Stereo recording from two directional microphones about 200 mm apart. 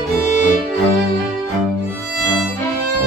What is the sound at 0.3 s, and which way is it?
Music, 40° left (ahead or behind).